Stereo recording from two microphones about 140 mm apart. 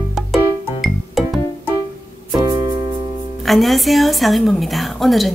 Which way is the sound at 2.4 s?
30° right (ahead or behind).